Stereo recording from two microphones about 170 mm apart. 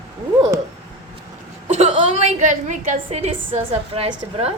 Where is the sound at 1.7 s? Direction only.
35° right (ahead or behind).